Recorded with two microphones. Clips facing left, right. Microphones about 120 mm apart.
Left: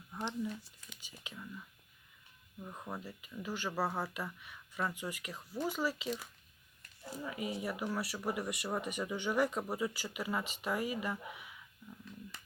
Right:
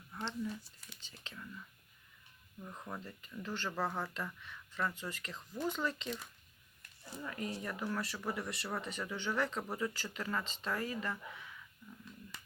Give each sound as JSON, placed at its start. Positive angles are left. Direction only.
{"t": 0.1, "sound": "a sound", "side_deg": 15}
{"t": 0.9, "sound": "whispering", "side_deg": 10}
{"t": 2.6, "sound": "speech", "side_deg": 10}